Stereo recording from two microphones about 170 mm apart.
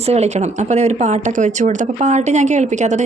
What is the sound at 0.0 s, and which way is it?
A woman's voice, 40° right (ahead or behind).